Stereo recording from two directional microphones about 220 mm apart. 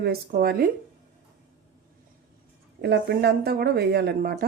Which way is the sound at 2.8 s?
50° right (ahead or behind).